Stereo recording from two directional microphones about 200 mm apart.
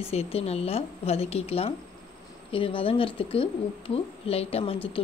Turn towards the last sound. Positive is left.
turn(degrees=25)  # may be behind; listen again after turning